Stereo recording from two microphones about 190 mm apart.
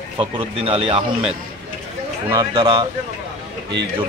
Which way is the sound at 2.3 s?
25° right (ahead or behind).